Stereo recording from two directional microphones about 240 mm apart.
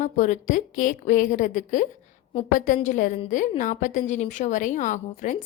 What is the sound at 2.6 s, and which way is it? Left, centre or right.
A woman's voice, left.